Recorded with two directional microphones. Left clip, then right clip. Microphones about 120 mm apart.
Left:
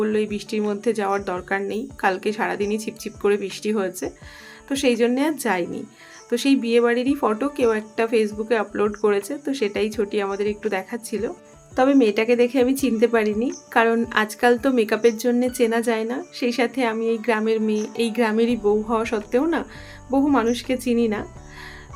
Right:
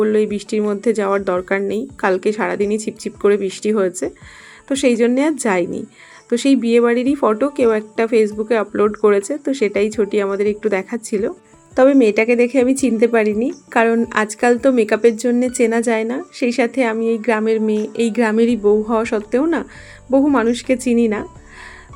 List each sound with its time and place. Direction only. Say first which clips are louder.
0.0 s a woman's voice: right 7 dB; 40° right (ahead or behind)